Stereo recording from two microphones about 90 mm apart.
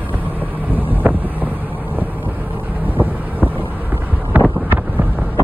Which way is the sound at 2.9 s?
20° right (ahead or behind).